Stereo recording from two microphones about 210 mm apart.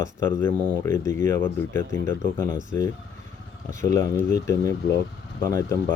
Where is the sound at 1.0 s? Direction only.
15° left (ahead or behind).